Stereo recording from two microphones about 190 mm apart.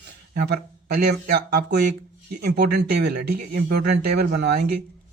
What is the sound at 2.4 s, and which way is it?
A man's voice, 60° right (ahead or behind).